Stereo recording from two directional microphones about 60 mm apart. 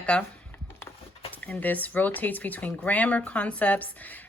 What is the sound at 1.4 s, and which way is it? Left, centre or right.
A woman's voice, left.